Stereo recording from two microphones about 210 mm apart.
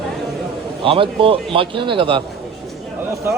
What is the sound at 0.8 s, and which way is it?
A man's voice, 25° right (ahead or behind).